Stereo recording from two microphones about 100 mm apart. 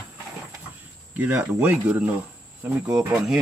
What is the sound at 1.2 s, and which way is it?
Speech, 15° right (ahead or behind).